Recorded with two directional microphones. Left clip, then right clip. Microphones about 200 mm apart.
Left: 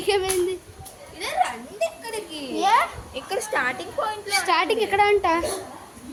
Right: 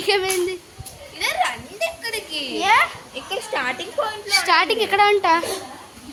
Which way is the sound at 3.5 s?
15° right (ahead or behind).